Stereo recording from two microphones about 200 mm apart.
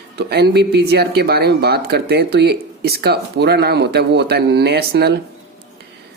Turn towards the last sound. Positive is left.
turn(degrees=-55)  # may be behind; listen again after turning